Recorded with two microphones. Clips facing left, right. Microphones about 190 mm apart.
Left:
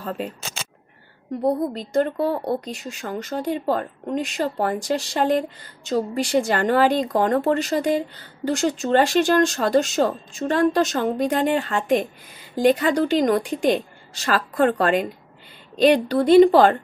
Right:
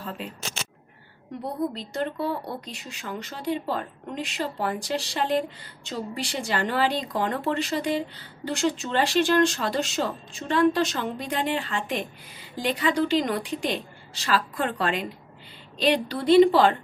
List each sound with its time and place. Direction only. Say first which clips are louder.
1.4 s speech: left 7 dB; 45° left (ahead or behind)